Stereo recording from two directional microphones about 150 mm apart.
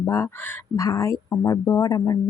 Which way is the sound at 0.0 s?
20° left (ahead or behind).